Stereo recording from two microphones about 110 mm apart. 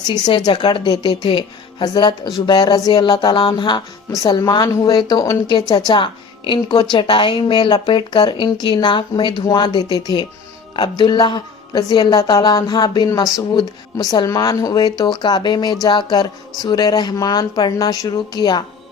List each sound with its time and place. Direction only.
0.1 s a woman's voice: 45° left (ahead or behind)
5.9 s a woman's voice: 50° left (ahead or behind)